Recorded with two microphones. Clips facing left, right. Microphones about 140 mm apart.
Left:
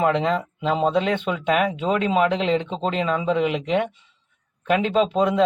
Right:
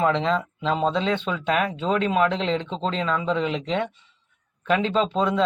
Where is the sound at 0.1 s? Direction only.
10° left (ahead or behind).